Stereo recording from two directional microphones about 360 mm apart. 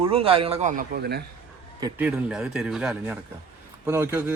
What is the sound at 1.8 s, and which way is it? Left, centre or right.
A man's voice, centre.